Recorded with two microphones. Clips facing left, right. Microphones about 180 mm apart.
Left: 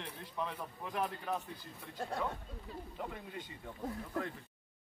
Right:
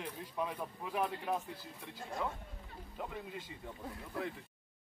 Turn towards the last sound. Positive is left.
turn(degrees=-5)  # may be behind; listen again after turning